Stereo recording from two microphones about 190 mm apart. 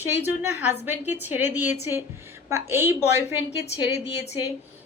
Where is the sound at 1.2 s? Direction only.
10° right (ahead or behind).